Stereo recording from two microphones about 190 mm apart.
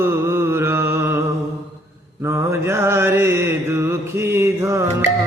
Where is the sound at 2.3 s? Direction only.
15° right (ahead or behind).